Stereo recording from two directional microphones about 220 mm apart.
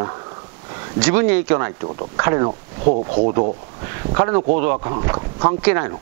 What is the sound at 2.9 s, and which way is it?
Speech, 35° right (ahead or behind).